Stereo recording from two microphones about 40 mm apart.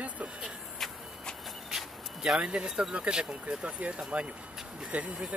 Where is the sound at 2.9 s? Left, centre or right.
Right.